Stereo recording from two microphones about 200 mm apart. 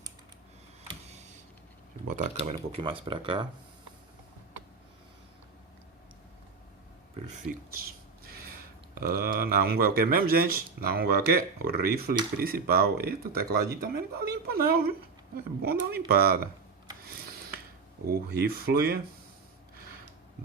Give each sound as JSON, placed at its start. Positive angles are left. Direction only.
{"t": 0.9, "sound": "a sound", "side_deg": -35}
{"t": 2.0, "sound": "speech", "side_deg": -35}
{"t": 9.0, "sound": "speech", "side_deg": -50}
{"t": 18.0, "sound": "speech", "side_deg": -50}